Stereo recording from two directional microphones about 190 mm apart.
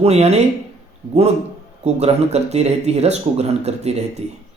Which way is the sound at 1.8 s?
35° right (ahead or behind).